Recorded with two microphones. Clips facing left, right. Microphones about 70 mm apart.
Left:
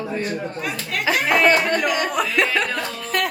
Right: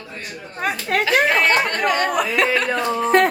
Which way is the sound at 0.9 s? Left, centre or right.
Right.